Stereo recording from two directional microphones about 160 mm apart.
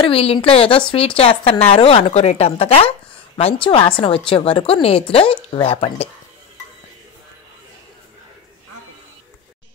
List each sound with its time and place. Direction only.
0.0 s speech: 35° left (ahead or behind)